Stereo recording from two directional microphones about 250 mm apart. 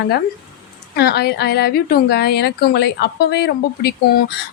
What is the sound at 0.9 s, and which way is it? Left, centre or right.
A woman's voice, left.